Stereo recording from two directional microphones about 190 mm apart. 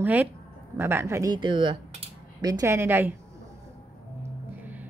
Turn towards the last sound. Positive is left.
turn(degrees=-10)  # may be behind; listen again after turning